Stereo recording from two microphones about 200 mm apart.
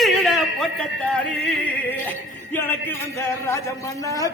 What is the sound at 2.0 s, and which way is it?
Speech, 10° left (ahead or behind).